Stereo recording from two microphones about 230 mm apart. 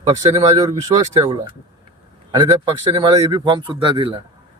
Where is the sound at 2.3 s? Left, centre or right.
Right.